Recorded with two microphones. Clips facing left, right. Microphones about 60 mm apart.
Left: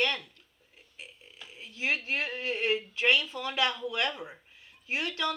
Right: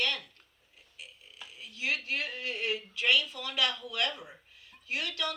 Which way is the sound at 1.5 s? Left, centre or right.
Left.